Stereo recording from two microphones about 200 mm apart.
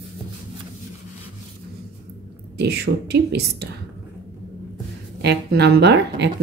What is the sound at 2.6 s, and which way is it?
Speech, 55° right (ahead or behind).